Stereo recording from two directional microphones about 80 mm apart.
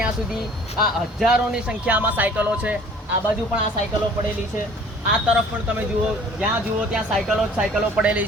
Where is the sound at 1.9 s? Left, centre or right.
Right.